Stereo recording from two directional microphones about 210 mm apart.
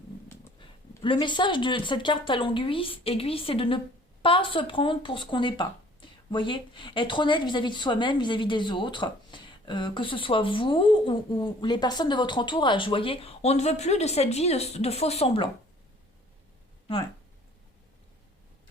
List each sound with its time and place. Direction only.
1.0 s speech: 25° left (ahead or behind)